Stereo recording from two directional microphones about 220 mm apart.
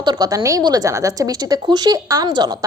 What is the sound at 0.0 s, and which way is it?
A woman's voice, 20° right (ahead or behind).